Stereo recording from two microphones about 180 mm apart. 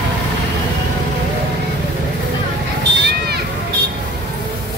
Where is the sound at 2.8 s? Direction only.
65° right (ahead or behind).